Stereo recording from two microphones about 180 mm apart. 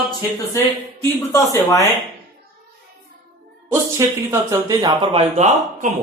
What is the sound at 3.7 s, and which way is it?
Speech, 15° right (ahead or behind).